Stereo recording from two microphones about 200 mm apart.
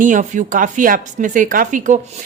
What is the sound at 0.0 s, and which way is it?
Speech, 40° right (ahead or behind).